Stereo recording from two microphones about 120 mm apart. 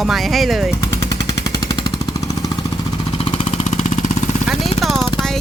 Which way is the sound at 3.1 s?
50° left (ahead or behind).